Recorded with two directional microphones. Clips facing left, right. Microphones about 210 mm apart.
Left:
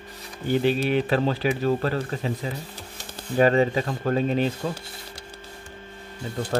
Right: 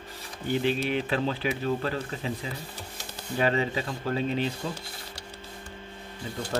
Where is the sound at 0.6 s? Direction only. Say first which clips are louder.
Left 5 dB; 40° left (ahead or behind).